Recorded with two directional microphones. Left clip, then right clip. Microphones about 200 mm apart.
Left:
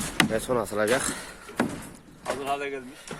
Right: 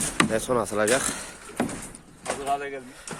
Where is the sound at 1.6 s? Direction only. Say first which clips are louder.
Left 1 dB; 40° left (ahead or behind).